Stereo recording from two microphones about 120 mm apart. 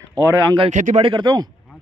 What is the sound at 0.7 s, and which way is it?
Speech, 85° right.